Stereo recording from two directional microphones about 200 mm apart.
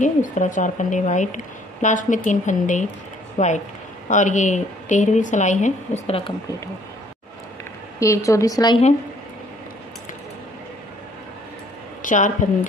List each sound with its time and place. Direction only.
0.0 s a woman's voice: 40° left (ahead or behind)
8.0 s a woman's voice: 15° left (ahead or behind)
12.0 s speech: 40° left (ahead or behind)